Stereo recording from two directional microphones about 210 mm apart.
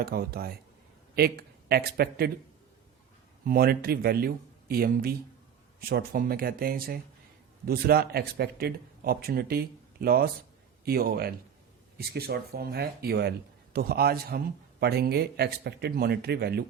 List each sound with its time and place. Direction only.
0.0 s a man's voice: 45° right (ahead or behind)
3.4 s a man's voice: 45° right (ahead or behind)